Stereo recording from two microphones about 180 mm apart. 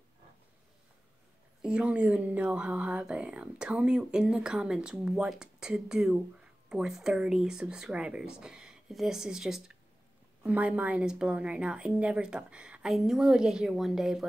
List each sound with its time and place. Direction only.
1.6 s speech: 5° right (ahead or behind)